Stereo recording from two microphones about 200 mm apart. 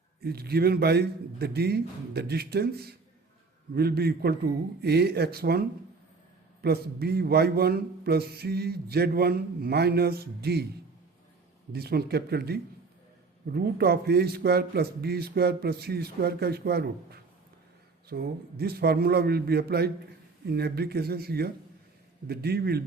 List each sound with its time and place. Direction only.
0.2 s a man's voice: 50° right (ahead or behind)
11.7 s a man's voice: 50° right (ahead or behind)